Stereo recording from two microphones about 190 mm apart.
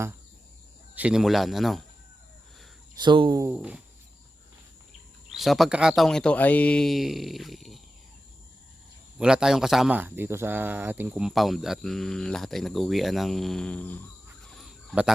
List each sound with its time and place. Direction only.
0.9 s speech: 5° right (ahead or behind)
3.0 s speech: 25° right (ahead or behind)
3.4 s a sound: 5° right (ahead or behind)
5.3 s speech: centre (ahead or behind)
9.1 s speech: 5° right (ahead or behind)
14.6 s chicken: centre (ahead or behind)